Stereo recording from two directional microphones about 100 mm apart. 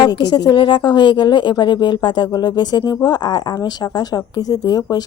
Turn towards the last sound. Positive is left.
turn(degrees=40)  # may be behind; listen again after turning